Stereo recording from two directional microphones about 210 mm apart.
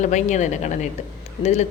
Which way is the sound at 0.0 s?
35° left (ahead or behind).